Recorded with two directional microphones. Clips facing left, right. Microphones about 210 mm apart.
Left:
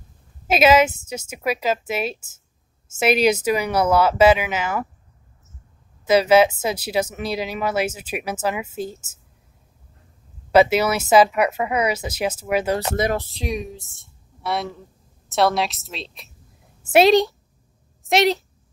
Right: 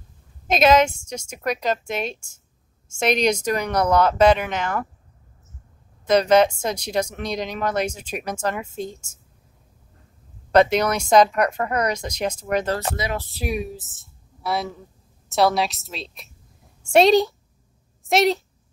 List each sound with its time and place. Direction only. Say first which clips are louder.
0.5 s a woman's voice: left 1 dB; 5° left (ahead or behind)
6.0 s speech: left 1 dB; 5° left (ahead or behind)
10.5 s speech: left 1 dB; 5° left (ahead or behind)
12.9 s speech: left 6 dB; 50° left (ahead or behind)
13.4 s a woman's voice: right 1 dB; 5° right (ahead or behind)